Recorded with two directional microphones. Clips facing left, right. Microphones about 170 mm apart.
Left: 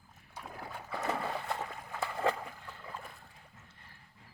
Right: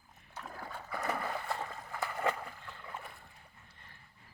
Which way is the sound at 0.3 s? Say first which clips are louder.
Even; 15° left (ahead or behind).